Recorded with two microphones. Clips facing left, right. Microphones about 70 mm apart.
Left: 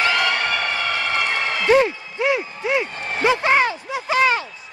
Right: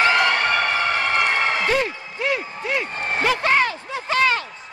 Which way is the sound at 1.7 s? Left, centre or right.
Centre.